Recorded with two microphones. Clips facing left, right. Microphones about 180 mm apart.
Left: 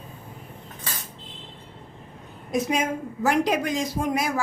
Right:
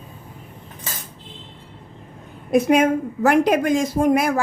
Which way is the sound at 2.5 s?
60° right (ahead or behind).